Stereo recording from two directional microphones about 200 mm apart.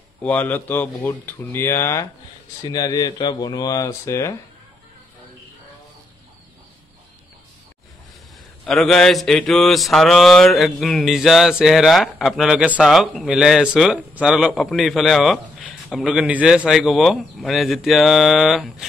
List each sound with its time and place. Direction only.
0.2 s speech: 10° left (ahead or behind)
8.6 s mantra: centre (ahead or behind)